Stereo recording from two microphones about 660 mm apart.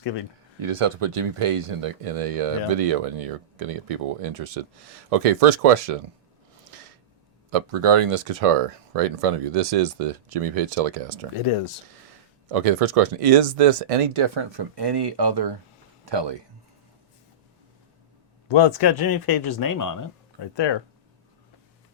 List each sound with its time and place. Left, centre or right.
0.6 s speech: right
7.5 s speech: right
12.5 s speech: right
18.4 s speech: left